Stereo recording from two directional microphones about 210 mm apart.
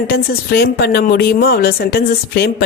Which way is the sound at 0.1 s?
50° left (ahead or behind).